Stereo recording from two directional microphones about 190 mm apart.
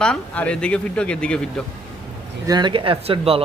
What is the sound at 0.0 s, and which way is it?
Speech, 5° left (ahead or behind).